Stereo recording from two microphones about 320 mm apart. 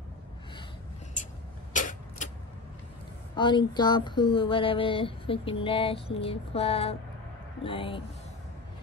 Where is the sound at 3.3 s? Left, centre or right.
Centre.